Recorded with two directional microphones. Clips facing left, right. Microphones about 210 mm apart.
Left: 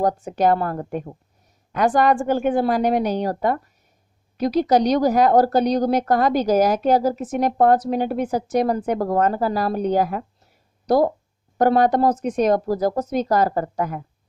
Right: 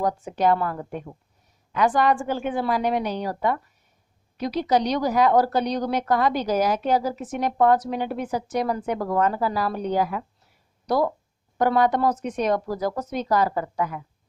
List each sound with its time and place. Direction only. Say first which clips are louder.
0.0 s a woman's voice: left 3 dB; 45° left (ahead or behind)